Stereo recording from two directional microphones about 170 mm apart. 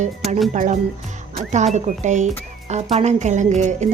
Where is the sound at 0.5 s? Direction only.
45° right (ahead or behind).